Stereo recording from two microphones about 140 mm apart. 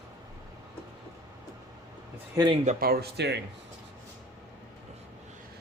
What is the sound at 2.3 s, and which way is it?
Speech, 35° right (ahead or behind).